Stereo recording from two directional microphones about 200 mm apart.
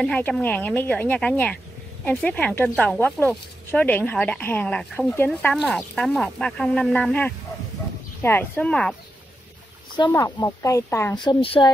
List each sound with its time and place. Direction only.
0.0 s speech: 5° left (ahead or behind)
9.9 s speech: 20° left (ahead or behind)